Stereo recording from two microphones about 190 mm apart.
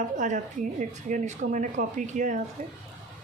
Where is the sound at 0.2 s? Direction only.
40° right (ahead or behind).